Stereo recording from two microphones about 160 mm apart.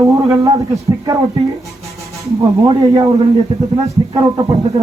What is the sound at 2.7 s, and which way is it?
Speech, 25° right (ahead or behind).